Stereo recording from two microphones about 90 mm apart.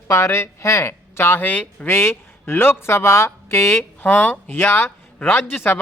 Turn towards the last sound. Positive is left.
turn(degrees=25)  # may be behind; listen again after turning